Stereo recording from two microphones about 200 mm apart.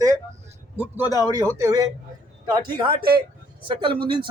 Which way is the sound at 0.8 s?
10° right (ahead or behind).